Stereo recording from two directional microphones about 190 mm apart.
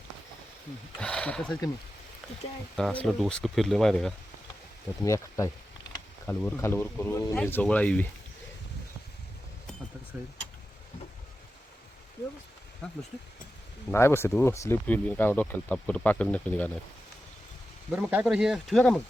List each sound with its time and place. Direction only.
0.9 s speech: 5° left (ahead or behind)
2.7 s speech: 5° left (ahead or behind)
5.0 s speech: 15° left (ahead or behind)
13.9 s speech: 15° left (ahead or behind)
17.9 s speech: 10° right (ahead or behind)